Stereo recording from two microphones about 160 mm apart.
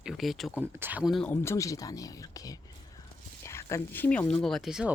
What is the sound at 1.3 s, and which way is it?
Speech, 15° left (ahead or behind).